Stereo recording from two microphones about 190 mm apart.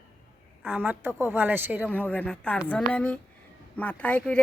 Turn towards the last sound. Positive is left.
turn(degrees=5)  # may be behind; listen again after turning